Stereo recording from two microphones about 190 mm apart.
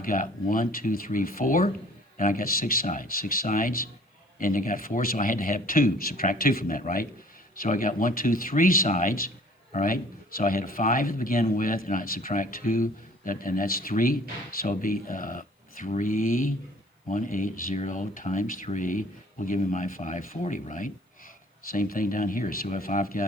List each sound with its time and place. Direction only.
0.0 s speech: 45° left (ahead or behind)